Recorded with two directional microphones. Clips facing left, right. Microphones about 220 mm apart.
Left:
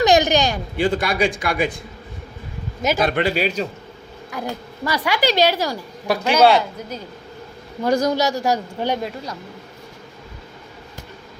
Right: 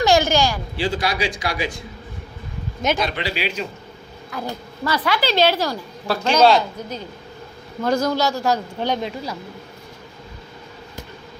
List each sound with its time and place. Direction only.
0.0 s a sound: 20° left (ahead or behind)
0.8 s a man's voice: 55° left (ahead or behind)
3.0 s a man's voice: 50° left (ahead or behind)
4.3 s speech: 15° left (ahead or behind)